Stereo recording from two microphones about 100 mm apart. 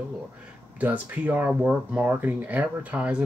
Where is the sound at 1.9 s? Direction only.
20° right (ahead or behind).